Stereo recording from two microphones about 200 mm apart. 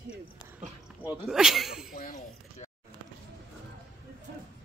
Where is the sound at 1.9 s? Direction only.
40° left (ahead or behind).